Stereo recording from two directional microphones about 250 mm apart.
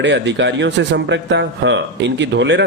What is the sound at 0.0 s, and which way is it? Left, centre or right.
Speech, right.